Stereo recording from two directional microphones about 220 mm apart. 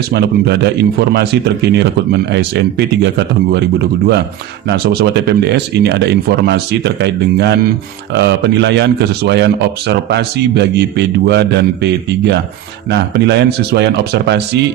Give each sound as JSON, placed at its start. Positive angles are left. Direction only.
{"t": 0.1, "sound": "a man's voice", "side_deg": -50}